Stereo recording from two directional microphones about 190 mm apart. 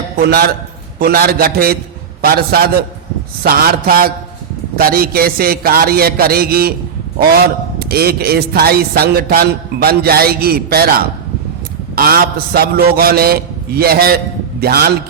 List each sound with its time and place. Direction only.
0.2 s a man's voice: 55° right (ahead or behind)
7.8 s a man's voice: 55° right (ahead or behind)